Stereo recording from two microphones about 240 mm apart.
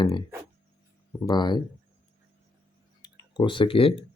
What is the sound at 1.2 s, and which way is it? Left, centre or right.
Speech, centre.